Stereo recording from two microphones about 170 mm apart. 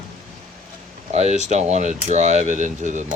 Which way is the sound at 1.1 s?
40° right (ahead or behind).